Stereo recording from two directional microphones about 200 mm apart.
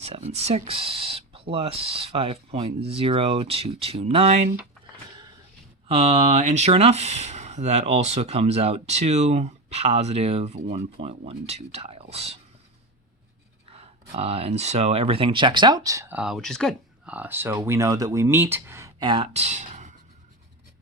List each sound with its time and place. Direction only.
0.0 s speech: 30° right (ahead or behind)
5.9 s speech: 30° right (ahead or behind)
13.7 s speech: 30° right (ahead or behind)